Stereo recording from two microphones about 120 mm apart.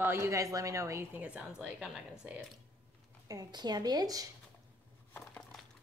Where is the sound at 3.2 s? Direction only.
30° right (ahead or behind).